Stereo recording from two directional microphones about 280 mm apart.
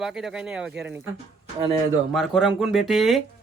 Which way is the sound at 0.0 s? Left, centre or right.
Centre.